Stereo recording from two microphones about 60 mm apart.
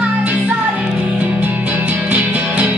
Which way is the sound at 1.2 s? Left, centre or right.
Right.